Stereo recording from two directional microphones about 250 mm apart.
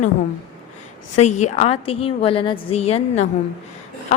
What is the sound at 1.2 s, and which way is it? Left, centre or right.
A woman's voice, left.